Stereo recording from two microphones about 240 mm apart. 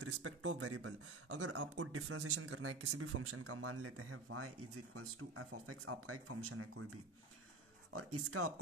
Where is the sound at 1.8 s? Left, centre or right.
Right.